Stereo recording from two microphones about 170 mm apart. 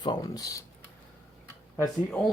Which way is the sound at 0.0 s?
25° left (ahead or behind).